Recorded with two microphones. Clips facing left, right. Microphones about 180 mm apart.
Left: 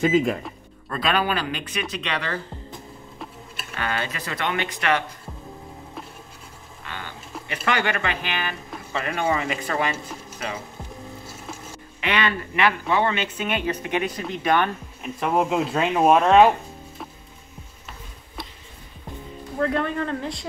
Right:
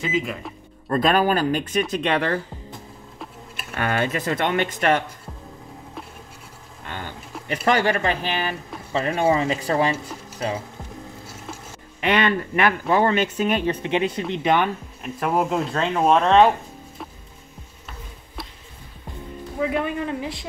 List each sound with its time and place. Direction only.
0.0 s speech: 50° left (ahead or behind)
0.8 s speech: 45° right (ahead or behind)
3.7 s speech: 50° right (ahead or behind)
7.4 s speech: 40° right (ahead or behind)
12.0 s speech: 45° right (ahead or behind); by 14.7 s 20° right (ahead or behind)
15.0 s speech: centre (ahead or behind)
19.6 s speech: 5° right (ahead or behind)